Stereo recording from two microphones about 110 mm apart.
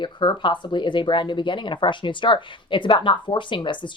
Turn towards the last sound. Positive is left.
turn(degrees=45)  # may be behind; listen again after turning